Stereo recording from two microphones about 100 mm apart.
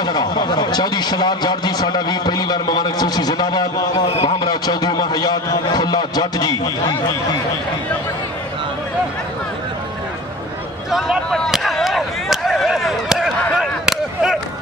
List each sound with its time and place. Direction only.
0.0 s a man's voice: 45° left (ahead or behind)
10.9 s speech: 5° right (ahead or behind)
11.2 s speech: 5° left (ahead or behind)
11.5 s a sound: centre (ahead or behind)